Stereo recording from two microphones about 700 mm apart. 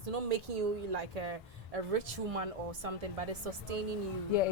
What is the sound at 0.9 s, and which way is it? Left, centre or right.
A man's voice, right.